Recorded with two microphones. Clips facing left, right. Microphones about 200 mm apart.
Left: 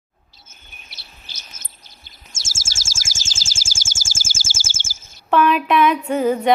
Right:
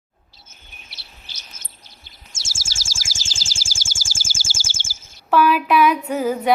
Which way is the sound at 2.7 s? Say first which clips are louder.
Even; 45° left (ahead or behind).